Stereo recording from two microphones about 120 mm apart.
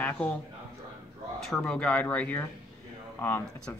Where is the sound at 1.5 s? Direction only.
5° left (ahead or behind).